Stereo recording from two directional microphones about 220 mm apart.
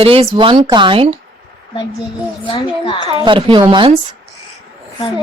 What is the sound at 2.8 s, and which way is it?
Speech, 25° left (ahead or behind).